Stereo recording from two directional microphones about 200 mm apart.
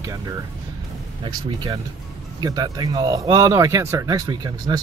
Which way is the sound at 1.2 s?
20° right (ahead or behind).